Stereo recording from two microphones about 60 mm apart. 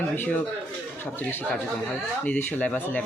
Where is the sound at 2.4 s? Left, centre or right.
Left.